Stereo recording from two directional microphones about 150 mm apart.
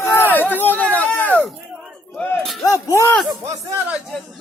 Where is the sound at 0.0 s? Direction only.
15° left (ahead or behind).